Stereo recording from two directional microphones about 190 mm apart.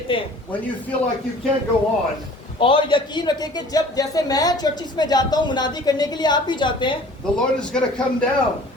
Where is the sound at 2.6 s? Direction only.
25° left (ahead or behind).